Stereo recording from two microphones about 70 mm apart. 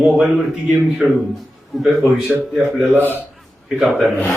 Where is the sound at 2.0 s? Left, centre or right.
Right.